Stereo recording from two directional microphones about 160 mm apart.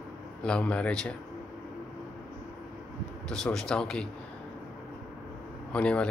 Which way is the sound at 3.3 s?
5° left (ahead or behind).